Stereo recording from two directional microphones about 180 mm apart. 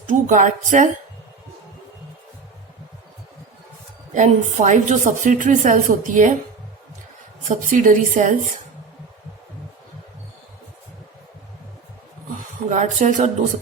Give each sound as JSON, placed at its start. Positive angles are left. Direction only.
{"t": 0.1, "sound": "a woman's voice", "side_deg": -45}
{"t": 4.1, "sound": "a woman's voice", "side_deg": -40}
{"t": 7.4, "sound": "a woman's voice", "side_deg": -45}
{"t": 12.6, "sound": "speech", "side_deg": -40}